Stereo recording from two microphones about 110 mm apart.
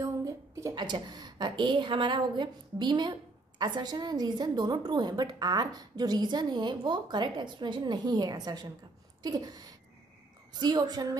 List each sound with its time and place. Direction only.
0.0 s a sound: 30° right (ahead or behind)
0.7 s a woman's voice: 40° right (ahead or behind)
10.6 s a woman's voice: 40° right (ahead or behind)